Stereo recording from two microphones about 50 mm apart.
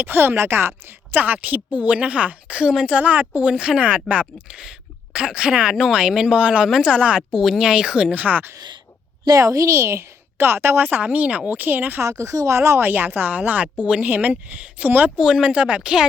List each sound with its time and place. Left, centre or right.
0.0 s speech: right
1.1 s a woman's voice: right; by 3.0 s centre
3.0 s a woman's voice: right
3.5 s a woman's voice: centre
7.3 s speech: centre
8.1 s speech: right
9.4 s a woman's voice: right
10.3 s speech: right
10.8 s speech: right
11.9 s speech: right
12.9 s a woman's voice: right
15.2 s speech: centre
15.4 s a woman's voice: right
15.8 s speech: centre